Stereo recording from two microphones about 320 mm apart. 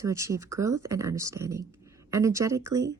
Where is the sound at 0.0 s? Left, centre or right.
Centre.